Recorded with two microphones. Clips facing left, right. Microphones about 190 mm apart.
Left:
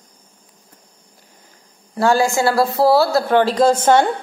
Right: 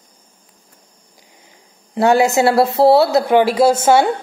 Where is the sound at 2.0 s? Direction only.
20° right (ahead or behind).